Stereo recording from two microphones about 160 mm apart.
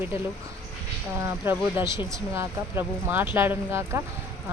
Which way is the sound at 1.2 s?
15° right (ahead or behind).